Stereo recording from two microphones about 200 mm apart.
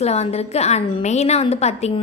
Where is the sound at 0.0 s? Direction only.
30° left (ahead or behind).